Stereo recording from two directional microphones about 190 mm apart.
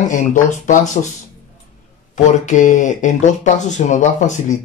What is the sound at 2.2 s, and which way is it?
A man's voice, 40° left (ahead or behind).